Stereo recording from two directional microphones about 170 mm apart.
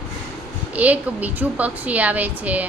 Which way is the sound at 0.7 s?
10° right (ahead or behind).